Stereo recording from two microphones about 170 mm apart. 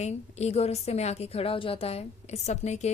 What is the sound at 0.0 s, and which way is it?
A woman's voice, 40° left (ahead or behind).